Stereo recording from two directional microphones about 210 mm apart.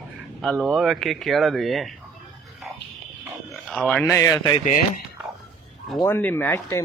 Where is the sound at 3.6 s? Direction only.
Centre (ahead or behind).